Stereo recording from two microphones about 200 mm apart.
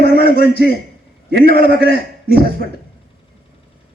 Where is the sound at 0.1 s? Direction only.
50° left (ahead or behind).